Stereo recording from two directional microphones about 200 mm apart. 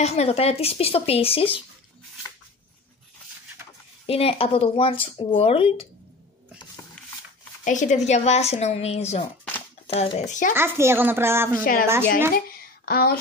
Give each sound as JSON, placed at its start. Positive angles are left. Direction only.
{"t": 0.0, "sound": "speech", "side_deg": 30}
{"t": 4.0, "sound": "speech", "side_deg": 30}
{"t": 7.6, "sound": "speech", "side_deg": 40}
{"t": 10.5, "sound": "a child's voice", "side_deg": -10}
{"t": 12.4, "sound": "a sound", "side_deg": 50}